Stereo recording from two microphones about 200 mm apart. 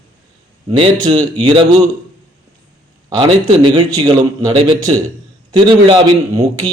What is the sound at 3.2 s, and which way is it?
A man's voice, 25° right (ahead or behind).